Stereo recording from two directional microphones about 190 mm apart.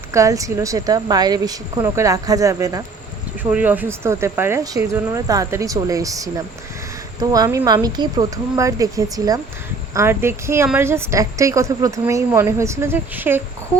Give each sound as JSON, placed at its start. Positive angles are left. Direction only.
{"t": 0.1, "sound": "a woman's voice", "side_deg": -15}